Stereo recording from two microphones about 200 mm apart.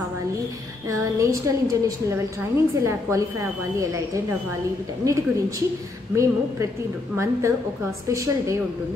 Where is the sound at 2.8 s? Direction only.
15° right (ahead or behind).